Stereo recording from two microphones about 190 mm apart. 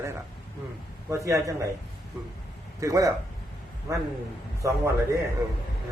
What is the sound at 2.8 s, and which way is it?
A man's voice, 15° right (ahead or behind).